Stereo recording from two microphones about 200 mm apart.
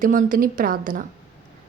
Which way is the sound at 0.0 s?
45° right (ahead or behind).